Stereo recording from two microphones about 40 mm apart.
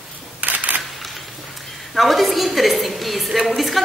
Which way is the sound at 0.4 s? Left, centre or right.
Right.